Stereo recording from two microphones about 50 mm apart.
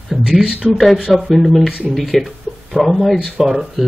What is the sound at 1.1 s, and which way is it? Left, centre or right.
Speech, centre.